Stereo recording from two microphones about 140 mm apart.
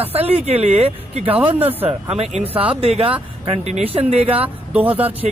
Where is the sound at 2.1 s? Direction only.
45° right (ahead or behind).